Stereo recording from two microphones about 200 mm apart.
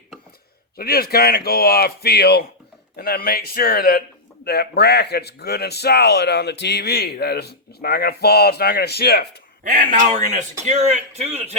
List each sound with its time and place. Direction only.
0.8 s speech: 50° left (ahead or behind)
9.6 s a man's voice: 40° right (ahead or behind)